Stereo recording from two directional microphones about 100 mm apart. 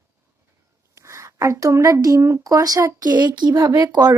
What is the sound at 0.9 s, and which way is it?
Speech, 30° right (ahead or behind).